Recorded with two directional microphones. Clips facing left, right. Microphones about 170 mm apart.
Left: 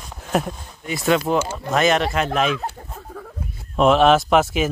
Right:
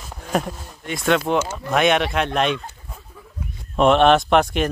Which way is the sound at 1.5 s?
Centre (ahead or behind).